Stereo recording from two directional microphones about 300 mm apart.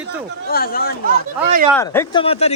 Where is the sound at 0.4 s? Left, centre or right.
Left.